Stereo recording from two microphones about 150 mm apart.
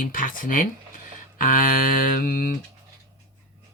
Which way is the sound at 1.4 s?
65° left (ahead or behind).